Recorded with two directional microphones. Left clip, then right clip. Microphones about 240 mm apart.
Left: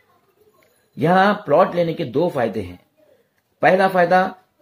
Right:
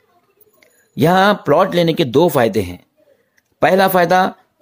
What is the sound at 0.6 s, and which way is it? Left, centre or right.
Speech, right.